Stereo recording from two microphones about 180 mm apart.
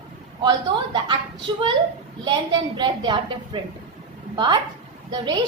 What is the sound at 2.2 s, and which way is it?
A woman's voice, 25° right (ahead or behind).